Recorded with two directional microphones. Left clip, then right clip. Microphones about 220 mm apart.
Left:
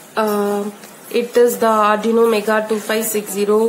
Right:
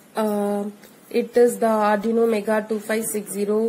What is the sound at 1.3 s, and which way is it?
A woman's voice, 10° right (ahead or behind).